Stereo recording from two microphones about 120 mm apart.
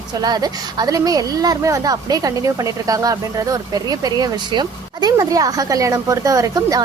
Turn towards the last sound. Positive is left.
turn(degrees=-30)  # may be behind; listen again after turning